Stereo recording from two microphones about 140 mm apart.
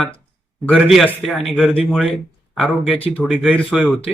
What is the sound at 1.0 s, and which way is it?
A man's voice, centre (ahead or behind).